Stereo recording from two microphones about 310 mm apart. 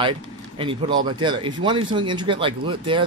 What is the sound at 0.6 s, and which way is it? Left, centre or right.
Speech, centre.